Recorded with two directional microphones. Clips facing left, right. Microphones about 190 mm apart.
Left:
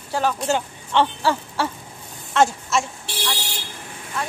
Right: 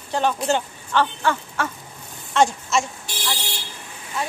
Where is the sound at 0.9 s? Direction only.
30° left (ahead or behind).